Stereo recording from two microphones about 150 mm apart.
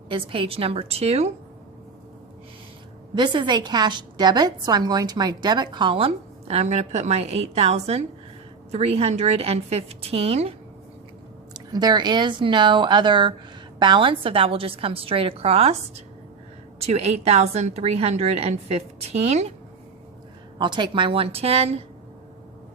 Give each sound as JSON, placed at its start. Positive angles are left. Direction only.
{"t": 0.1, "sound": "a woman's voice", "side_deg": -35}
{"t": 3.2, "sound": "a woman's voice", "side_deg": -30}
{"t": 11.5, "sound": "a woman's voice", "side_deg": -25}
{"t": 16.8, "sound": "a woman's voice", "side_deg": -45}
{"t": 20.6, "sound": "a woman's voice", "side_deg": -30}